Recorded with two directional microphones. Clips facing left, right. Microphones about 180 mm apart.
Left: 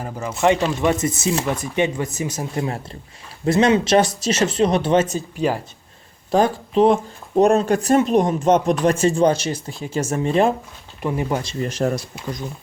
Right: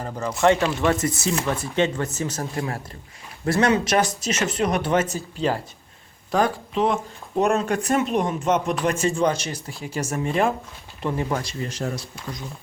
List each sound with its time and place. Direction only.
0.0 s speech: 5° left (ahead or behind)
6.3 s speech: 30° left (ahead or behind)
9.8 s speech: 25° left (ahead or behind)
11.0 s speech: 15° left (ahead or behind)
11.6 s speech: 55° left (ahead or behind)